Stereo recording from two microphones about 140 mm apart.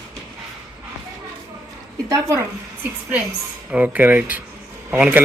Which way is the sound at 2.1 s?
25° right (ahead or behind).